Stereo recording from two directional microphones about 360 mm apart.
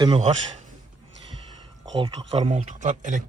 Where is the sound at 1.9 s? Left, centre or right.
Centre.